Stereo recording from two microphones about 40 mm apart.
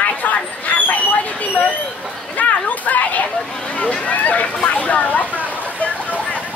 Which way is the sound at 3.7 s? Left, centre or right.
Left.